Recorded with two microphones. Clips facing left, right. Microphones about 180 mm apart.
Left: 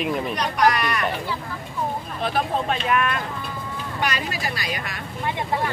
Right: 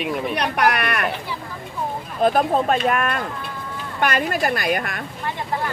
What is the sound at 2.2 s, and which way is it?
A woman's voice, 45° right (ahead or behind).